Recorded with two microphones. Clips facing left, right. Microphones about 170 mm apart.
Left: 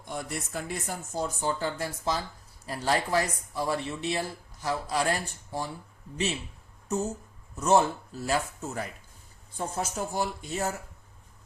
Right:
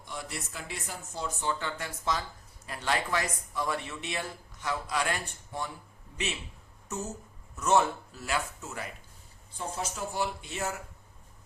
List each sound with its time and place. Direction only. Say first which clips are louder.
0.0 s speech: left 4 dB; 50° left (ahead or behind); by 5.7 s 35° left (ahead or behind)
6.8 s speech: left 7 dB; 30° left (ahead or behind)